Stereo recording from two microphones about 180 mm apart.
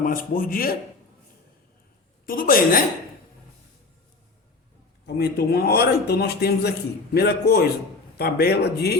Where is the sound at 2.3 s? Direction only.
50° left (ahead or behind).